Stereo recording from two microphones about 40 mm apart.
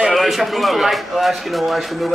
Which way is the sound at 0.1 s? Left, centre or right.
Centre.